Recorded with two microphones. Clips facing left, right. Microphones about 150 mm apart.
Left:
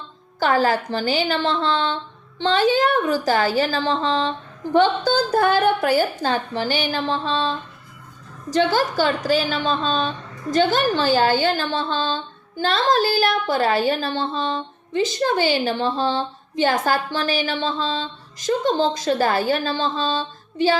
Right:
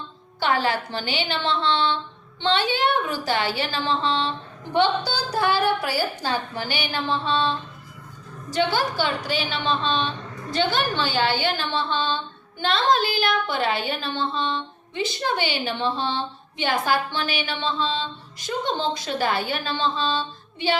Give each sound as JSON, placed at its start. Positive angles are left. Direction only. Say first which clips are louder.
{"t": 0.3, "sound": "a woman's voice", "louder": "left 4 dB", "side_deg": 40}